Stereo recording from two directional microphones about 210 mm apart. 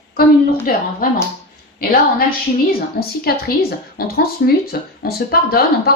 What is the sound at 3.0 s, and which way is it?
A woman's voice, 45° left (ahead or behind).